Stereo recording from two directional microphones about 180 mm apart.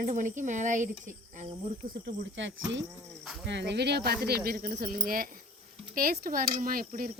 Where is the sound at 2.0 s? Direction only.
90° right.